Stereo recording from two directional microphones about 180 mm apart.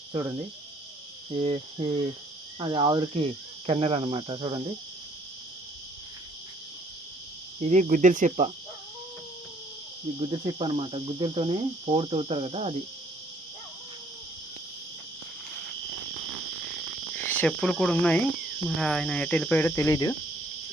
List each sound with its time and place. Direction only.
0.1 s cricket: 25° right (ahead or behind)
1.4 s speech: 30° right (ahead or behind)
3.7 s cricket: 35° right (ahead or behind)
7.6 s speech: 40° right (ahead or behind)
10.2 s cricket: 30° right (ahead or behind)
17.2 s speech: 10° left (ahead or behind)
18.8 s cricket: 5° left (ahead or behind); by 20.1 s 20° left (ahead or behind)